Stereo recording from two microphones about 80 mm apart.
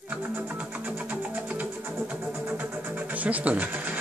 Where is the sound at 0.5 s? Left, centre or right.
Centre.